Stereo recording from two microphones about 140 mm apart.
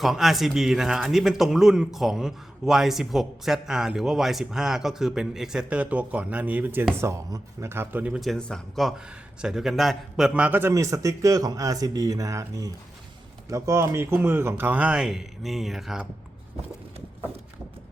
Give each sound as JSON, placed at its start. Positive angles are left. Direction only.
{"t": 0.0, "sound": "speech", "side_deg": 0}
{"t": 8.2, "sound": "speech", "side_deg": 5}